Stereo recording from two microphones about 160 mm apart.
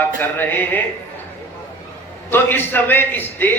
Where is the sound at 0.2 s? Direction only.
10° left (ahead or behind).